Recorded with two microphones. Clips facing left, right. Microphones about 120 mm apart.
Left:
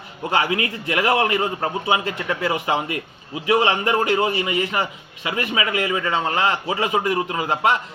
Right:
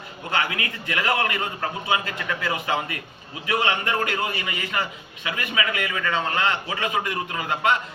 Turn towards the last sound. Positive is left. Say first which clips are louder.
# left 3 dB
turn(degrees=35)  # may be behind; listen again after turning